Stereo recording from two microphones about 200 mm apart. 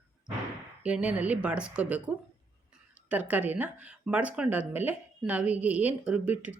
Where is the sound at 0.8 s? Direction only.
5° right (ahead or behind).